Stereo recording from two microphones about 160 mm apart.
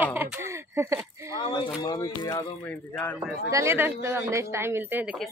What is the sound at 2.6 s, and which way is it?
Speech, 10° left (ahead or behind).